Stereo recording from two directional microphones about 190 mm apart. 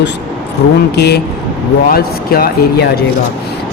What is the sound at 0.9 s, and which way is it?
Speech, 60° left (ahead or behind).